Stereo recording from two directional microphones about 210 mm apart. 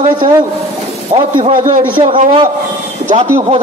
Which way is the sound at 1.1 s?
30° right (ahead or behind).